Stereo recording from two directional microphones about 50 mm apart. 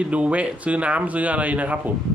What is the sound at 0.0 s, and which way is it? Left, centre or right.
A man's voice, right.